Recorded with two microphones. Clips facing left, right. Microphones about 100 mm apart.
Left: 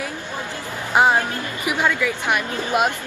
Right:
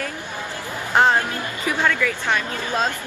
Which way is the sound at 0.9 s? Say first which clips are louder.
Left 1 dB; 10° left (ahead or behind).